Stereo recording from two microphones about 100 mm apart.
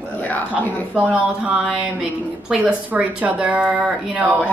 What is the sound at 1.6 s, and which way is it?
A woman's voice, 5° right (ahead or behind).